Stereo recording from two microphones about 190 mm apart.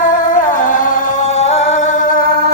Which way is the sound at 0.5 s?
45° left (ahead or behind).